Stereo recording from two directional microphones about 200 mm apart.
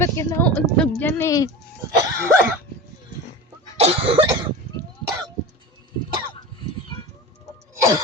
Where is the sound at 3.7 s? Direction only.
30° right (ahead or behind).